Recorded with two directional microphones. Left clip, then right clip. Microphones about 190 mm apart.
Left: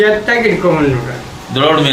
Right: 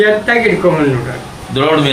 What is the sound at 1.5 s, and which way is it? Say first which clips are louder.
Speech: left 1 dB; 20° left (ahead or behind).